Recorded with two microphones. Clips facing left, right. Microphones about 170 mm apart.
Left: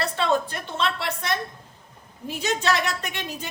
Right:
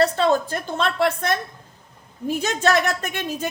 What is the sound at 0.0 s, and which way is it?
A woman's voice, 40° right (ahead or behind).